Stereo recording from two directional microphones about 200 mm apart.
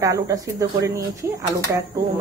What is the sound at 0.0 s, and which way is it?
Speech, 15° right (ahead or behind).